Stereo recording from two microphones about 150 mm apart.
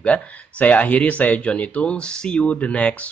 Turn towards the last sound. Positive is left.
turn(degrees=10)  # may be behind; listen again after turning